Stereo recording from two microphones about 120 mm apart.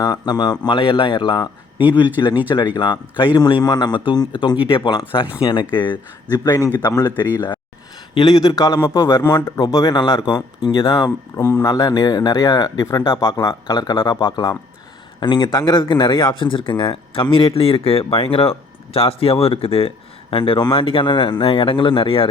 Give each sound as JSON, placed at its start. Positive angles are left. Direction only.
{"t": 0.0, "sound": "a man's voice", "side_deg": 35}